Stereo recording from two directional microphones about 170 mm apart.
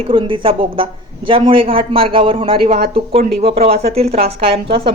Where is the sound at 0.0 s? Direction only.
30° right (ahead or behind).